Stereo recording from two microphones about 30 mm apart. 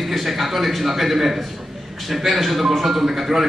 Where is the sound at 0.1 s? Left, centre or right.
Centre.